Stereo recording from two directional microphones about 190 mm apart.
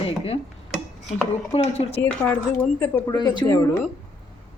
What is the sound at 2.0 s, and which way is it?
Speech, 10° left (ahead or behind).